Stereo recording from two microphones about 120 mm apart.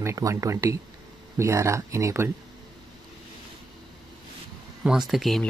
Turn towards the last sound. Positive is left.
turn(degrees=0)  # may be behind; listen again after turning